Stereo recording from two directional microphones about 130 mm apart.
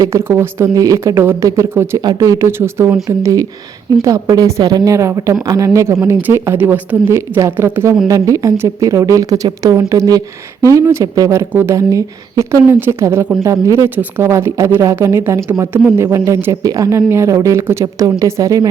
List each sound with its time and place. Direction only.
0.0 s a woman's voice: 20° right (ahead or behind)